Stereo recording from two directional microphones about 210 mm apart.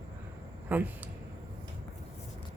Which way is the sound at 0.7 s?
10° right (ahead or behind).